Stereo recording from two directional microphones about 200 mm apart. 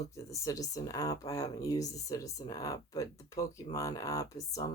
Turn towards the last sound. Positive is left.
turn(degrees=15)  # may be behind; listen again after turning